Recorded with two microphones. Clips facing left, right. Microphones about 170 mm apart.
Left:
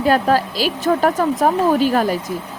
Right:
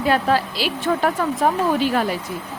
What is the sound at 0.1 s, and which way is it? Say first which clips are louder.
A woman's voice: left 3 dB; 45° left (ahead or behind).